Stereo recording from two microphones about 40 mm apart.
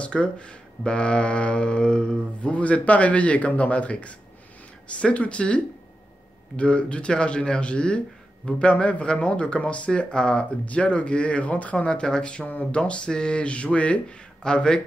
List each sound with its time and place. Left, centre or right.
0.0 s speech: left
11.7 s speech: left
14.4 s speech: left